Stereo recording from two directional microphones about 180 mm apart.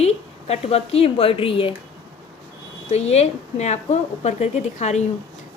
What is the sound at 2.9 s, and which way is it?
A woman's voice, 35° left (ahead or behind).